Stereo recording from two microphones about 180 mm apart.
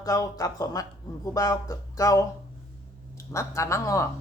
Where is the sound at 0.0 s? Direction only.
20° left (ahead or behind).